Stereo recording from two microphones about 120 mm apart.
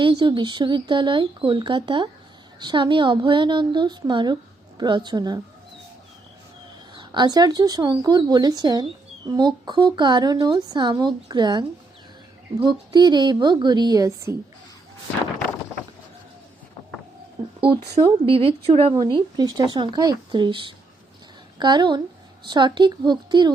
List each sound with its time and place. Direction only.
0.0 s speech: 40° right (ahead or behind)
6.9 s speech: 40° right (ahead or behind)
12.6 s speech: 35° right (ahead or behind)
17.6 s speech: 50° right (ahead or behind)
18.9 s speech: 40° right (ahead or behind)